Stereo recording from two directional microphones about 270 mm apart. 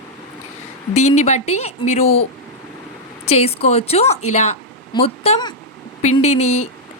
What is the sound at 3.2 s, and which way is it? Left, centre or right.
A woman's voice, left.